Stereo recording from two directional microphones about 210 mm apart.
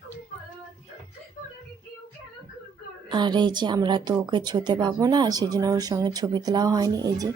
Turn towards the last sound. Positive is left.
turn(degrees=-15)  # may be behind; listen again after turning